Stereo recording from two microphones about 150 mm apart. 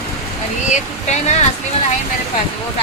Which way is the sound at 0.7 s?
50° left (ahead or behind).